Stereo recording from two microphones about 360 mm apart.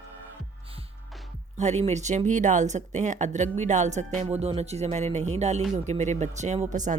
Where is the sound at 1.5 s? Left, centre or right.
Centre.